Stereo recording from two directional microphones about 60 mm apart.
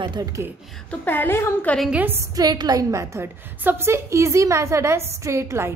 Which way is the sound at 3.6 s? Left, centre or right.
Right.